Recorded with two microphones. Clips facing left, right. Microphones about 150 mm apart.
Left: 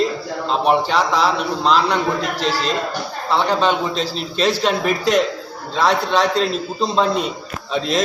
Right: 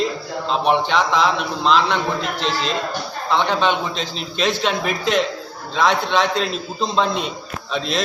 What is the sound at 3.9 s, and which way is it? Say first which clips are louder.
Speech: left 4 dB; 40° left (ahead or behind).